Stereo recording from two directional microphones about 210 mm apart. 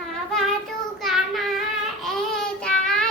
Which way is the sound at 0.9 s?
Centre (ahead or behind).